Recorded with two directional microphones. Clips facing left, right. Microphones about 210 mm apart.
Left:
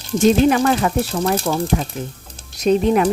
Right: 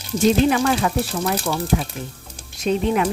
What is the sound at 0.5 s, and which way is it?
Speech, 40° left (ahead or behind).